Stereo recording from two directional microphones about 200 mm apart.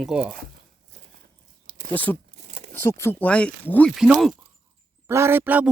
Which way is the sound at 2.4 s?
35° right (ahead or behind).